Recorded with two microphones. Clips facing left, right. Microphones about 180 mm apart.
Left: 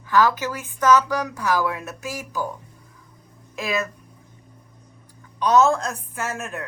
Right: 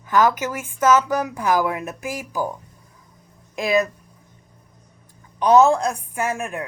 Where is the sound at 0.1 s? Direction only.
20° right (ahead or behind).